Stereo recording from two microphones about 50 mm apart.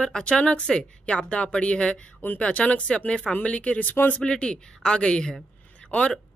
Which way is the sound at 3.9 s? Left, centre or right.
Left.